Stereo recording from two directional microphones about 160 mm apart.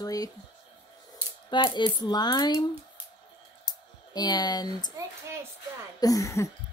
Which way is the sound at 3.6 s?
25° left (ahead or behind).